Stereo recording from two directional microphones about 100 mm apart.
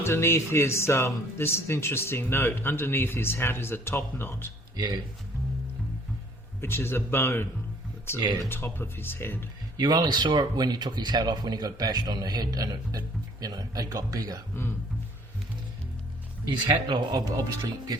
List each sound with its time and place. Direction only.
0.0 s speech: 25° left (ahead or behind)
6.6 s speech: 25° left (ahead or behind)
8.4 s speech: 20° left (ahead or behind)
9.7 s speech: 40° right (ahead or behind)
16.5 s speech: 45° right (ahead or behind)